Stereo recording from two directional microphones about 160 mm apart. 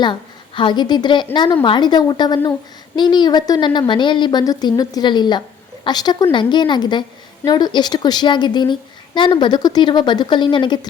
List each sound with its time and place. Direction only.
0.0 s a woman's voice: 30° left (ahead or behind)